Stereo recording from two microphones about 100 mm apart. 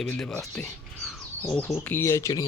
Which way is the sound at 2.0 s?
30° left (ahead or behind).